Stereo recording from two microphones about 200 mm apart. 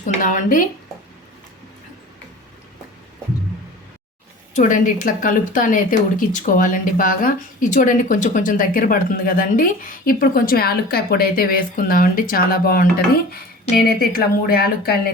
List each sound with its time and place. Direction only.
0.0 s speech: 40° left (ahead or behind)
4.5 s speech: 40° left (ahead or behind)